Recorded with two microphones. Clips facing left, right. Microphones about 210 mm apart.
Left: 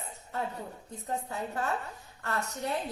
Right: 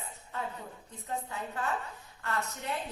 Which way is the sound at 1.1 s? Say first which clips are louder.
Left 3 dB; 40° left (ahead or behind).